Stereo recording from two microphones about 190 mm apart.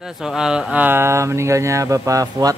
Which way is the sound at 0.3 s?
5° right (ahead or behind).